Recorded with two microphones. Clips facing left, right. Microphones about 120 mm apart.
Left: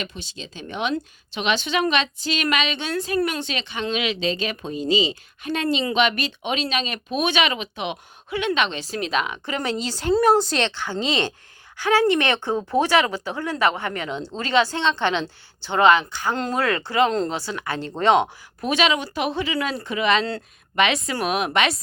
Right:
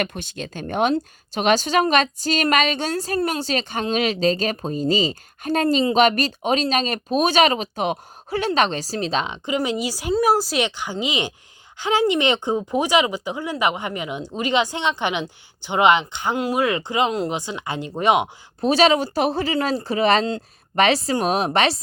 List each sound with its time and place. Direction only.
0.0 s speech: 55° right (ahead or behind); by 9.4 s 30° right (ahead or behind)
9.5 s speech: 15° right (ahead or behind)
18.6 s speech: 35° right (ahead or behind)